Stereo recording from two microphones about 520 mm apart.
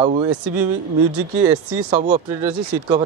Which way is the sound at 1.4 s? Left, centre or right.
Centre.